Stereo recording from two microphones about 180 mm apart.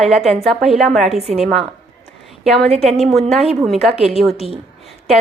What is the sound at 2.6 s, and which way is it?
Speech, 35° right (ahead or behind).